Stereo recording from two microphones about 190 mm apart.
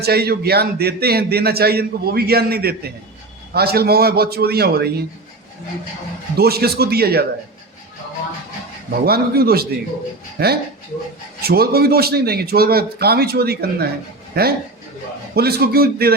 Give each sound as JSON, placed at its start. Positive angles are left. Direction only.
{"t": 0.0, "sound": "speech", "side_deg": -55}
{"t": 6.3, "sound": "speech", "side_deg": -55}
{"t": 9.0, "sound": "a man's voice", "side_deg": -55}